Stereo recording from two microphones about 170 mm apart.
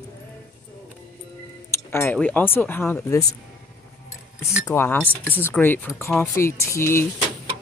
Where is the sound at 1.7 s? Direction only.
15° left (ahead or behind).